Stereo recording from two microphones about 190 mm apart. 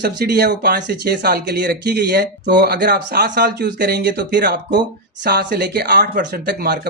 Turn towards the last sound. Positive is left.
turn(degrees=-60)  # may be behind; listen again after turning